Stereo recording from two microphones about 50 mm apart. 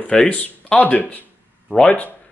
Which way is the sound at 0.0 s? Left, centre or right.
Centre.